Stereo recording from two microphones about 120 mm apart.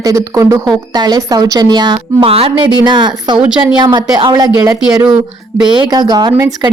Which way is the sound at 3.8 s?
40° right (ahead or behind).